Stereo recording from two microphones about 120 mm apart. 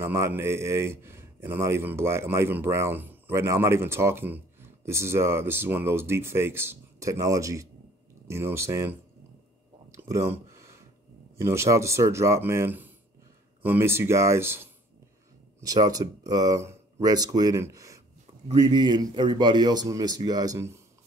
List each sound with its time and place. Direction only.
0.0 s speech: 20° right (ahead or behind)
9.8 s a sound: 25° right (ahead or behind)
11.3 s speech: 20° right (ahead or behind)
15.6 s speech: 30° right (ahead or behind)
18.6 s speech: 40° right (ahead or behind); by 20.8 s 25° right (ahead or behind)